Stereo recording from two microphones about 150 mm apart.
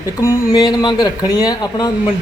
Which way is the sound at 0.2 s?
20° left (ahead or behind).